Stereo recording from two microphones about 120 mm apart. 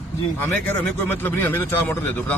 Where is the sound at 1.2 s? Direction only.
15° left (ahead or behind).